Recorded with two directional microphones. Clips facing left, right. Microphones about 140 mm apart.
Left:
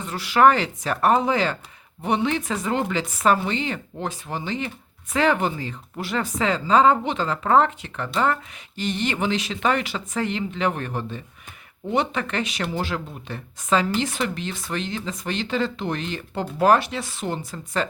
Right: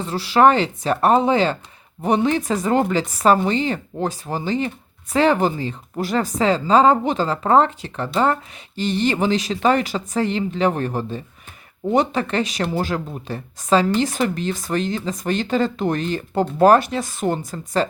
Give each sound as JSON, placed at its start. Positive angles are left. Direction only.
{"t": 0.0, "sound": "speech", "side_deg": -30}
{"t": 2.0, "sound": "speech", "side_deg": -40}